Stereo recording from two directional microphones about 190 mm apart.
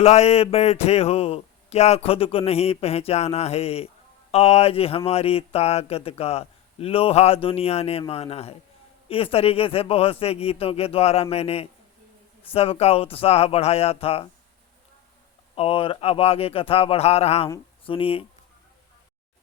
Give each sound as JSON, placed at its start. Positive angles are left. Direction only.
{"t": 0.0, "sound": "speech", "side_deg": 35}
{"t": 15.5, "sound": "speech", "side_deg": 30}